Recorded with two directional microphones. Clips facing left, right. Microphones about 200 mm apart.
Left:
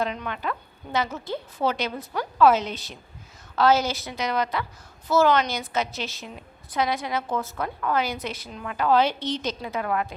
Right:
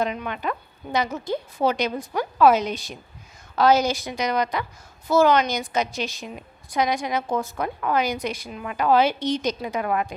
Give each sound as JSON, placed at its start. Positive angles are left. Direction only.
{"t": 0.0, "sound": "a woman's voice", "side_deg": -15}